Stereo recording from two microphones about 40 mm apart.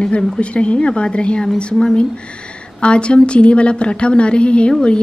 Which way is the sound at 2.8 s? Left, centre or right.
Left.